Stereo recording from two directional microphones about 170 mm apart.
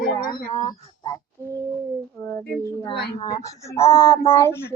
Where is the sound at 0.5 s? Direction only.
25° left (ahead or behind).